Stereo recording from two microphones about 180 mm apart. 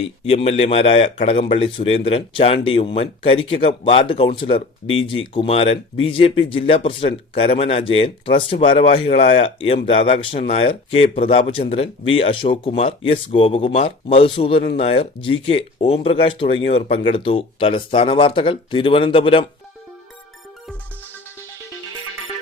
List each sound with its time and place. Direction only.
0.0 s speech: 30° left (ahead or behind)